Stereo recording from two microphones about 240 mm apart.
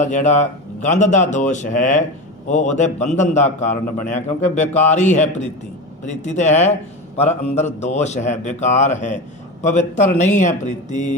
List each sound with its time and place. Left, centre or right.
0.0 s a man's voice: left
6.0 s a man's voice: left